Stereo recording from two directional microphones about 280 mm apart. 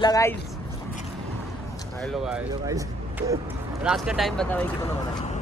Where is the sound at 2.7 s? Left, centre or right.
Centre.